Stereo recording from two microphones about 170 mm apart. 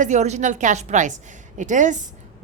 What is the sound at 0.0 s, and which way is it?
A woman's voice, 45° right (ahead or behind).